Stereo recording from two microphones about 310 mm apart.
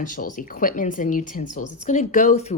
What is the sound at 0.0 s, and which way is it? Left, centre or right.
Speech, left.